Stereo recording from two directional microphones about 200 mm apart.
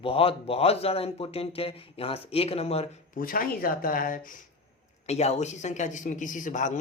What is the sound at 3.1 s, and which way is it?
Speech, 45° left (ahead or behind).